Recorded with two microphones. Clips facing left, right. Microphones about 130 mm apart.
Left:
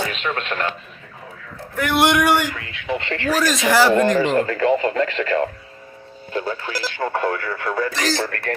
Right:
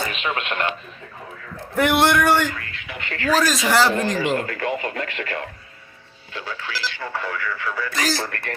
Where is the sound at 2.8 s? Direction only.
30° left (ahead or behind).